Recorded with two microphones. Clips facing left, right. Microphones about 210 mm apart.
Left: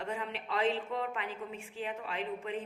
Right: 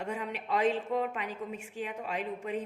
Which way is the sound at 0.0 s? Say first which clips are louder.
Right 2 dB; 45° right (ahead or behind).